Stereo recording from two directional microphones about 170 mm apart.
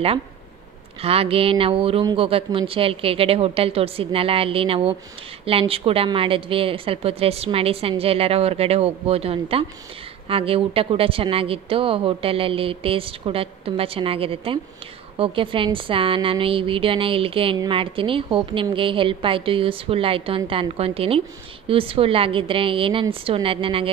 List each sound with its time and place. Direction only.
1.0 s speech: 35° right (ahead or behind)